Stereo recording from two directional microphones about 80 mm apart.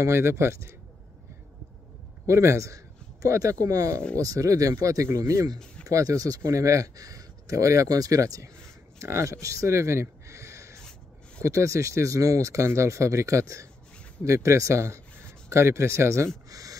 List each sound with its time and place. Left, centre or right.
0.0 s speech: right
2.2 s a man's voice: right
16.4 s a sound: right